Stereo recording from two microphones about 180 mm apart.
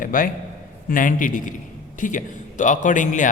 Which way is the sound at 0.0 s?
50° left (ahead or behind).